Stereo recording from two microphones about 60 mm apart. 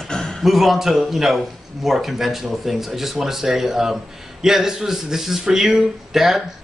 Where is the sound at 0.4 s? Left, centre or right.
Centre.